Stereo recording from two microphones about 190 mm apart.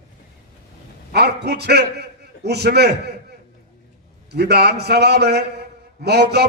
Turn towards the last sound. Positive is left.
turn(degrees=-60)  # may be behind; listen again after turning